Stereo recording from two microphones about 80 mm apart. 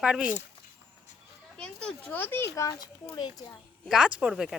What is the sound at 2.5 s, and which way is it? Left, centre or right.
Speech, left.